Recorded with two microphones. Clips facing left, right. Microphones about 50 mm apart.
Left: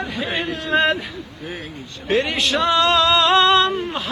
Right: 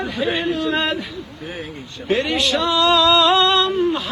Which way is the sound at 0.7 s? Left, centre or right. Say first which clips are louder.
Left 7 dB; centre.